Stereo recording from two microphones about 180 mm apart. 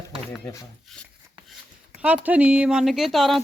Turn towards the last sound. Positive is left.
turn(degrees=0)  # may be behind; listen again after turning